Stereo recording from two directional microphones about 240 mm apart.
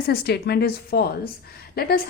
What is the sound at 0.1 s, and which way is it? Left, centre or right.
A woman's voice, left.